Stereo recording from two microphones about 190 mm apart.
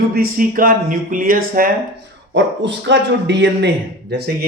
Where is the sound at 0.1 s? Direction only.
50° right (ahead or behind).